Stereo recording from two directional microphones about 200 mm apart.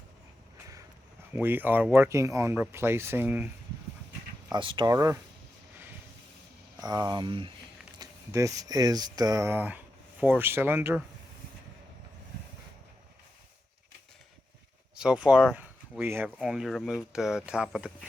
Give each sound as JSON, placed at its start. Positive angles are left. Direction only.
{"t": 1.3, "sound": "speech", "side_deg": -10}
{"t": 4.5, "sound": "speech", "side_deg": -25}
{"t": 6.7, "sound": "speech", "side_deg": -20}
{"t": 14.9, "sound": "speech", "side_deg": -5}